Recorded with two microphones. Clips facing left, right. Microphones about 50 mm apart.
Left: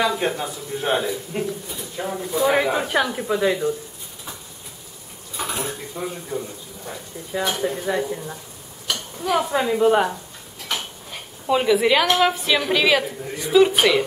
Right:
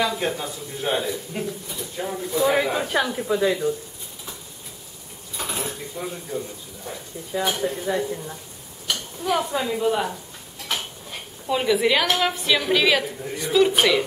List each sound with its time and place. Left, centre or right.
0.0 s a woman's voice: centre
5.4 s a woman's voice: centre
8.8 s stir: centre
9.6 s speech: left
11.4 s a woman's voice: centre